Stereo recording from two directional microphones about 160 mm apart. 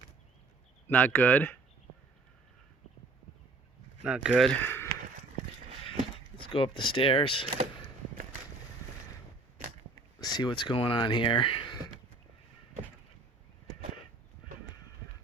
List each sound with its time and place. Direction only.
0.9 s speech: 10° left (ahead or behind)
4.0 s speech: 5° right (ahead or behind); by 4.9 s 15° left (ahead or behind)
6.5 s speech: 30° left (ahead or behind)
10.2 s speech: 25° left (ahead or behind)